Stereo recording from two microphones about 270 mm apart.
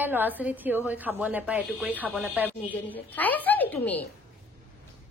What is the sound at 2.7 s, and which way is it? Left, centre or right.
A woman's voice, centre.